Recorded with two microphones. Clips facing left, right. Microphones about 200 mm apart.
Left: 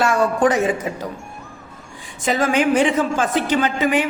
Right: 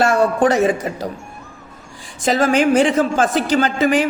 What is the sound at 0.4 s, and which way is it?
Speech, 35° right (ahead or behind).